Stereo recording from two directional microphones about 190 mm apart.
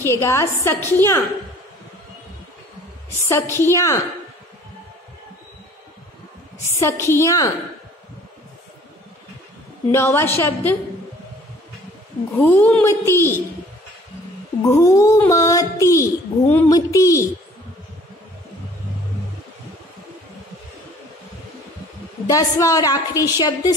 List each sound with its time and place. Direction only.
0.0 s a child's voice: 15° left (ahead or behind)
3.3 s a child's voice: 15° left (ahead or behind)
6.6 s a child's voice: 15° left (ahead or behind)
9.8 s a child's voice: 15° left (ahead or behind)
12.4 s a child's voice: 10° left (ahead or behind)
14.6 s a child's voice: 15° left (ahead or behind)
22.3 s a woman's voice: 15° left (ahead or behind)